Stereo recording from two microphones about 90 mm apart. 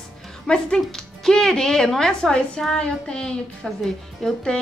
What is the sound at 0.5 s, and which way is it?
A woman's voice, 5° left (ahead or behind).